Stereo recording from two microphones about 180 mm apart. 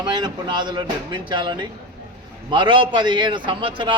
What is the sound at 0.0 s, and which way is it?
A man's voice, 25° right (ahead or behind).